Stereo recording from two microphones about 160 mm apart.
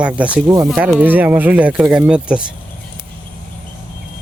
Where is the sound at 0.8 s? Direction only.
10° right (ahead or behind).